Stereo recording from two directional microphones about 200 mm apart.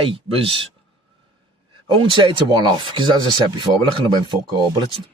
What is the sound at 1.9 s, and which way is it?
Speech, 25° right (ahead or behind).